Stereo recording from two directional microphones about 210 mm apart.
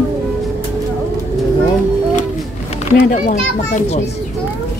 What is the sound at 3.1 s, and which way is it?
Speech, 35° left (ahead or behind).